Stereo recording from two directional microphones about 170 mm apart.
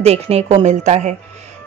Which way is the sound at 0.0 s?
35° right (ahead or behind).